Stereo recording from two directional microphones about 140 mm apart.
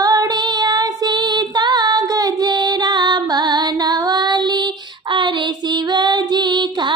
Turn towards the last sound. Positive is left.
turn(degrees=-30)  # may be behind; listen again after turning